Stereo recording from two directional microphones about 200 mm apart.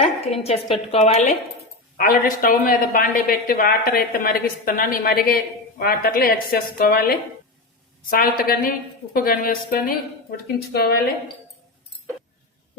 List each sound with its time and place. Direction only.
0.0 s a woman's voice: 30° left (ahead or behind)
2.0 s a woman's voice: 45° left (ahead or behind)